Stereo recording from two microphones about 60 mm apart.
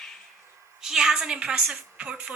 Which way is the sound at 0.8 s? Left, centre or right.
Centre.